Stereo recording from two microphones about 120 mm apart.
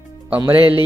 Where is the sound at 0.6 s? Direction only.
50° right (ahead or behind).